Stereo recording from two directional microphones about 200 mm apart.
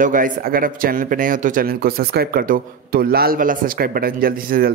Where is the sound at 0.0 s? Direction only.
45° right (ahead or behind).